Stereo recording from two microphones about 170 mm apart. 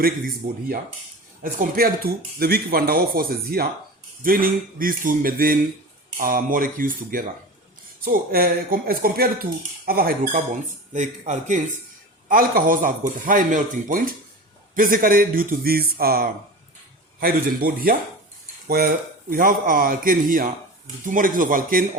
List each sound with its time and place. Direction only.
1.4 s speech: 55° right (ahead or behind)
12.3 s a man's voice: 55° right (ahead or behind)